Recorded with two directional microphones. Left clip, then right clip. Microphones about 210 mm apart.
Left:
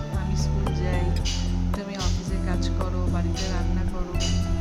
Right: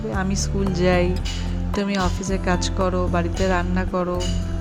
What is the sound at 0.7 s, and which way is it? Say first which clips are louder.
Speech: right 11 dB; 40° right (ahead or behind).